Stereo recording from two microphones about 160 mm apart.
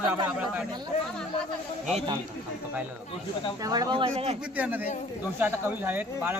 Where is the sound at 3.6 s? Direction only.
25° right (ahead or behind).